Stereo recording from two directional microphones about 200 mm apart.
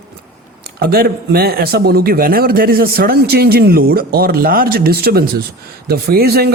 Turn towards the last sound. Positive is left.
turn(degrees=-50)  # may be behind; listen again after turning